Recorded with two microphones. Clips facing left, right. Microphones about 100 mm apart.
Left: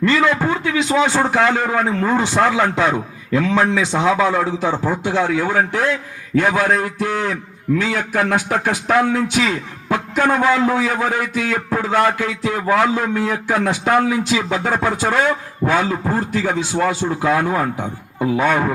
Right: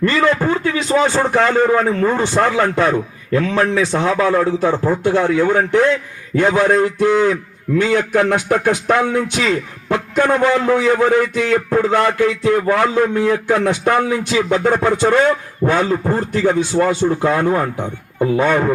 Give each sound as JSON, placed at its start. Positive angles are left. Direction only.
{"t": 1.0, "sound": "a man's voice", "side_deg": 5}